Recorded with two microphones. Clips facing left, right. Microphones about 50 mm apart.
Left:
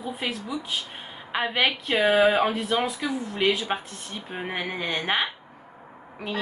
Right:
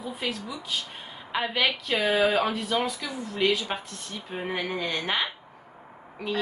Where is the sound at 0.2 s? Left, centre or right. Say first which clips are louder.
Left 2 dB; left.